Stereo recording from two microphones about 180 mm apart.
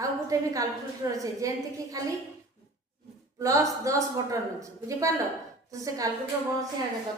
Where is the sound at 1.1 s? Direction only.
20° right (ahead or behind).